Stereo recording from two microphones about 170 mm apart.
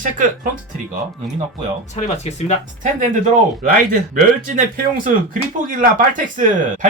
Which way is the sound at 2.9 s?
50° right (ahead or behind).